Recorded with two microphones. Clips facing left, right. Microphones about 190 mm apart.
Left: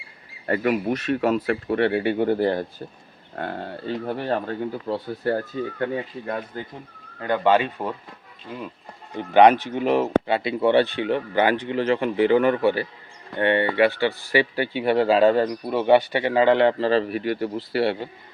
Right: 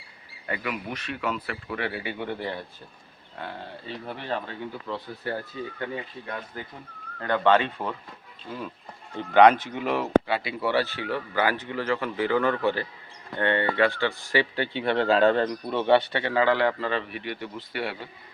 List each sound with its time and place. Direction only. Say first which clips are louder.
0.4 s speech: left 10 dB; 45° left (ahead or behind)
3.3 s speech: left 7 dB; 50° left (ahead or behind)
7.2 s speech: left 2 dB; 15° left (ahead or behind)
9.1 s speech: left 2 dB; 20° left (ahead or behind)